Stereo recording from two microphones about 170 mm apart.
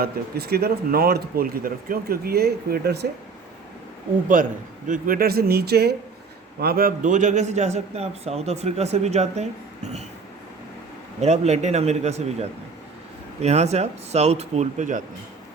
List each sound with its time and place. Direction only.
0.0 s speech: 70° right (ahead or behind)
4.3 s a man's voice: 50° right (ahead or behind)
11.2 s a man's voice: 40° right (ahead or behind)